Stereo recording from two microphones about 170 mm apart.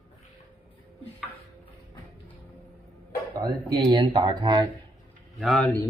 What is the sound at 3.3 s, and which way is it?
Speech, 25° right (ahead or behind).